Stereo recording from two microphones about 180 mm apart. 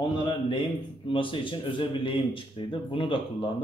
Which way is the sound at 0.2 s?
25° left (ahead or behind).